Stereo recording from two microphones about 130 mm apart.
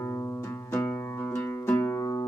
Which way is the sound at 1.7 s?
20° left (ahead or behind).